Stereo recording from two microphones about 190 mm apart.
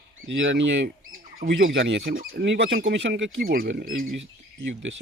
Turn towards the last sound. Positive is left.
turn(degrees=-80)